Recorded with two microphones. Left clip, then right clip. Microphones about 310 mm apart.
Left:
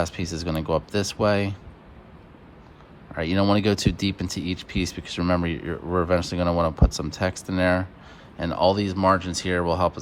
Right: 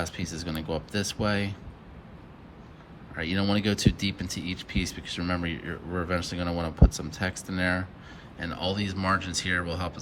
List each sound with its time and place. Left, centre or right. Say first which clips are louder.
0.0 s speech: left 6 dB; centre
3.2 s speech: left 6 dB; centre